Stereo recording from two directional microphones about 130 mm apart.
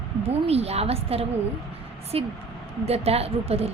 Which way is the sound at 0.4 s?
50° right (ahead or behind).